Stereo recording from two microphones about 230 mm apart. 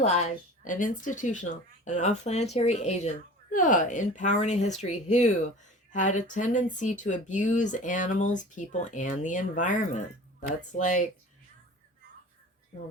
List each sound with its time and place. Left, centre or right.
0.0 s speech: left